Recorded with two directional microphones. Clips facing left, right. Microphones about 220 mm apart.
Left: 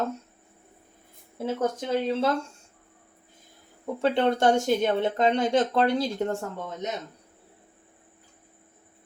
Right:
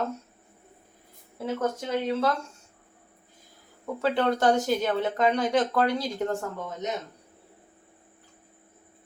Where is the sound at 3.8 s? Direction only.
25° left (ahead or behind).